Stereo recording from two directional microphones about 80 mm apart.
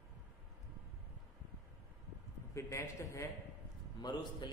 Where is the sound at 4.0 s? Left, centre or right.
Left.